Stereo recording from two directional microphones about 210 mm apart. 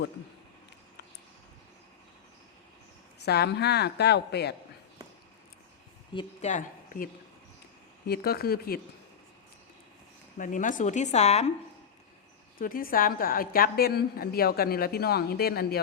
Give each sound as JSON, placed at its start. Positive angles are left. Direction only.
{"t": 3.2, "sound": "a woman's voice", "side_deg": 50}
{"t": 6.1, "sound": "a woman's voice", "side_deg": 35}
{"t": 10.3, "sound": "speech", "side_deg": 40}
{"t": 12.5, "sound": "a woman's voice", "side_deg": 45}